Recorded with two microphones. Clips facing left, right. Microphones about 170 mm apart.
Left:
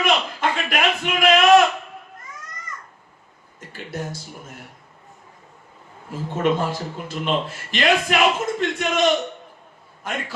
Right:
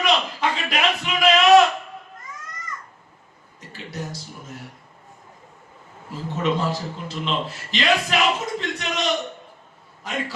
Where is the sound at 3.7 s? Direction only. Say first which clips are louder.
Left 2 dB; 50° left (ahead or behind).